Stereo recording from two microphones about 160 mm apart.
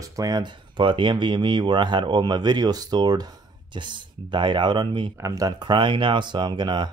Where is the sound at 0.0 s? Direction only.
20° right (ahead or behind).